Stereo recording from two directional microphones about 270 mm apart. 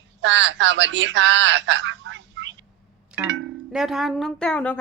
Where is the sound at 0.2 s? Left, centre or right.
Right.